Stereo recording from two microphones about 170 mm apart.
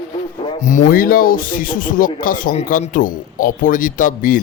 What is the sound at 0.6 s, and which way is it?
A man's voice, 55° left (ahead or behind).